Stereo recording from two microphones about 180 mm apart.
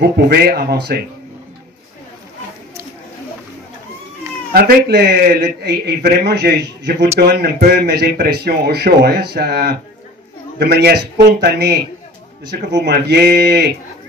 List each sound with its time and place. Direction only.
0.0 s speech: 60° right (ahead or behind)
4.6 s speech: 60° right (ahead or behind)